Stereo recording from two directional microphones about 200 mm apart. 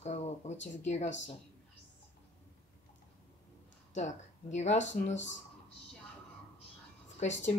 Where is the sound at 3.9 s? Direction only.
35° left (ahead or behind).